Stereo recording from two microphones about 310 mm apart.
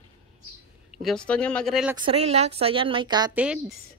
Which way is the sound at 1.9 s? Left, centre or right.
Centre.